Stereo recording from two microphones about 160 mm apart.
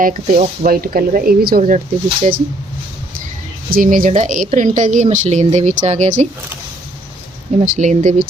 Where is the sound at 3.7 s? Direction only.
60° right (ahead or behind).